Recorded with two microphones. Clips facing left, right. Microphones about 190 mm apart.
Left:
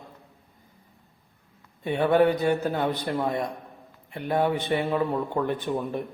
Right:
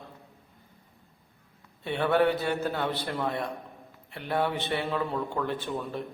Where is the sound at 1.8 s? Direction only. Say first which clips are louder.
Left 4 dB; 15° left (ahead or behind).